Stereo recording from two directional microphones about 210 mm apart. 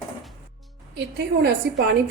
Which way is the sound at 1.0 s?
50° right (ahead or behind).